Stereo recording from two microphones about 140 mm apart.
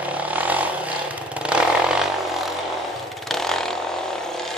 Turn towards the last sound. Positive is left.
turn(degrees=5)  # may be behind; listen again after turning